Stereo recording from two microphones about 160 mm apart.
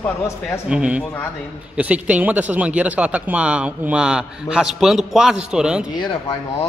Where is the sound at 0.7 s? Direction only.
5° right (ahead or behind).